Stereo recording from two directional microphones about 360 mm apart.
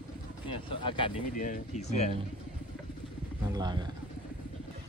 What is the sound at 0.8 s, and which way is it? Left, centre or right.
Speech, centre.